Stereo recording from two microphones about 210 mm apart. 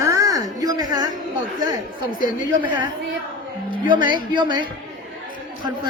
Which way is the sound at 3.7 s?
20° right (ahead or behind).